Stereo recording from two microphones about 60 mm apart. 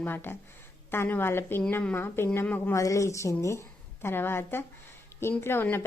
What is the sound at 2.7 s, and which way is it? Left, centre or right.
A woman's voice, left.